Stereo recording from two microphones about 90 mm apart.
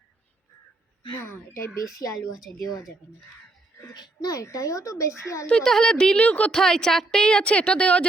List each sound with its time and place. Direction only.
1.2 s speech: 30° left (ahead or behind)
3.9 s speech: 50° left (ahead or behind)
5.5 s a woman's voice: 5° left (ahead or behind)